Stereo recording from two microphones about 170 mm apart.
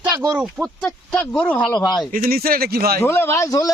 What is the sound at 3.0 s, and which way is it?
Speech, 15° left (ahead or behind).